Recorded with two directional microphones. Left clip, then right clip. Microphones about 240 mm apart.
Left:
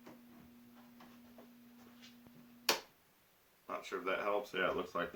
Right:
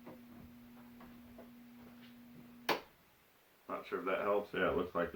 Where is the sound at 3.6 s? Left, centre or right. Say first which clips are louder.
Right 1 dB; left.